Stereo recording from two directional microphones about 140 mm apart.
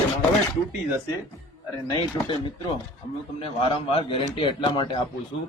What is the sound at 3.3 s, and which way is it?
Speech, 40° left (ahead or behind).